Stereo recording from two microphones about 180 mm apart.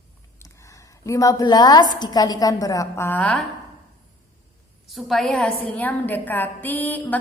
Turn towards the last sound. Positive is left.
turn(degrees=10)  # may be behind; listen again after turning